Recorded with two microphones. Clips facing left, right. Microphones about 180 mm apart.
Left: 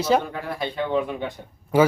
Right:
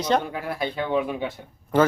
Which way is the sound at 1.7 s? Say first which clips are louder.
Left 2 dB; 10° left (ahead or behind).